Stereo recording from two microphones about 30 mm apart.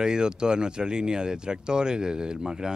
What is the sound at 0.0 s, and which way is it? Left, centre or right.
Speech, right.